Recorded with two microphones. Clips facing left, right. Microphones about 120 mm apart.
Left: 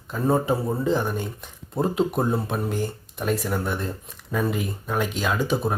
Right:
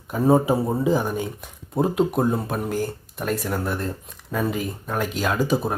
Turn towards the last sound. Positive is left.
turn(degrees=-5)  # may be behind; listen again after turning